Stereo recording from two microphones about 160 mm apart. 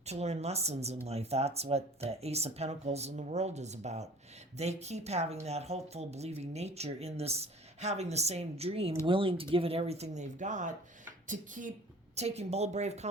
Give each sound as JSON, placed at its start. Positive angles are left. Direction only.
{"t": 0.0, "sound": "a woman's voice", "side_deg": -45}
{"t": 12.1, "sound": "a woman's voice", "side_deg": -40}